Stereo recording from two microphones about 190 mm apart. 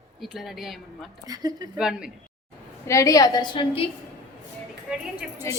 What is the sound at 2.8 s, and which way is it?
A woman's voice, 15° left (ahead or behind).